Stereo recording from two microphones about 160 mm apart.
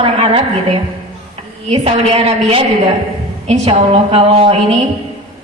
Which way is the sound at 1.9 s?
40° right (ahead or behind).